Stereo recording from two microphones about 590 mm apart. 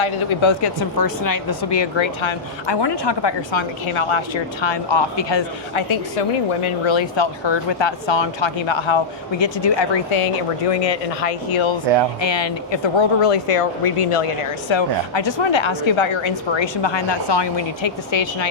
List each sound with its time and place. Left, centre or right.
0.0 s speech: left